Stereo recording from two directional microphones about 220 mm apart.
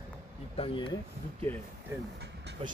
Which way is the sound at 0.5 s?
25° left (ahead or behind).